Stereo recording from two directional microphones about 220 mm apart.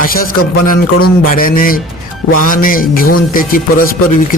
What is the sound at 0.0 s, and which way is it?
A man's voice, 40° left (ahead or behind).